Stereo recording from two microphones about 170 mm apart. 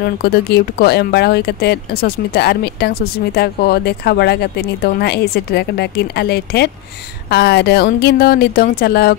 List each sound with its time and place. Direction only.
0.2 s speech: 70° left (ahead or behind)